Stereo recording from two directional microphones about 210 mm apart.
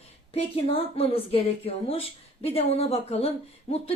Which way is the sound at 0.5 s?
25° left (ahead or behind).